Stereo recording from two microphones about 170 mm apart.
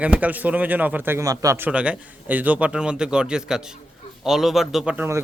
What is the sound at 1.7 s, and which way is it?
Speech, 5° right (ahead or behind).